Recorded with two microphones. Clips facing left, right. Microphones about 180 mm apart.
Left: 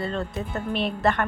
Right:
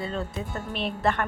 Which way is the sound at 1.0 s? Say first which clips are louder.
Left 2 dB; 60° left (ahead or behind).